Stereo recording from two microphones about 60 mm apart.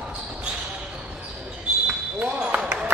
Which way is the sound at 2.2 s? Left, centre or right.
Centre.